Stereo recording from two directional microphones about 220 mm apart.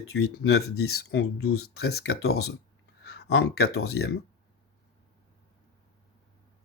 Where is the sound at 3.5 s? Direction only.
45° left (ahead or behind).